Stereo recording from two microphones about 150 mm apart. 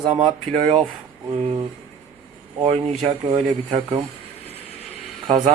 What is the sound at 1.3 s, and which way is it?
Speech, 40° right (ahead or behind).